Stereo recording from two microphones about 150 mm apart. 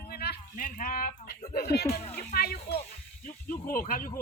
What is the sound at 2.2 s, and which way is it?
Speech, 90° left.